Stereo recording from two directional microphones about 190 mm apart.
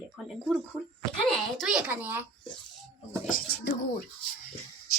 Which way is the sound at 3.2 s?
50° left (ahead or behind).